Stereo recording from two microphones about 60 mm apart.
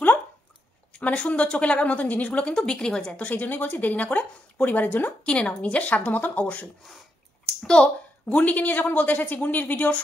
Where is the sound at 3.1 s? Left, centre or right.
Left.